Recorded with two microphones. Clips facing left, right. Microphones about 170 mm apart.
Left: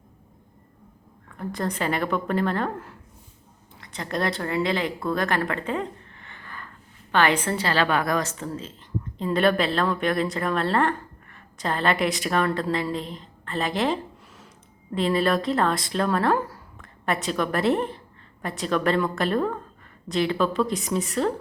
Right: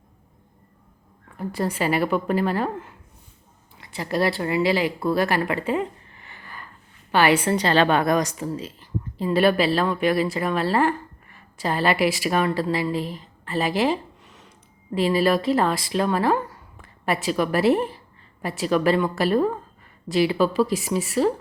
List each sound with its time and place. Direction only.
1.4 s a woman's voice: 5° right (ahead or behind)
7.1 s a woman's voice: 10° right (ahead or behind)